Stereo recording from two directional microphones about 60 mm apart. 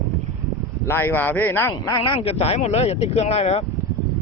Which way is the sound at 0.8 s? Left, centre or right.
Left.